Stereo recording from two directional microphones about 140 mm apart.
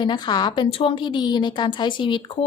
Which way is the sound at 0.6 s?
40° left (ahead or behind).